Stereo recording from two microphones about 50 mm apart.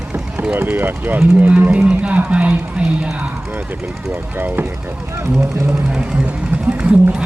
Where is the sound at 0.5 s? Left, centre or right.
Right.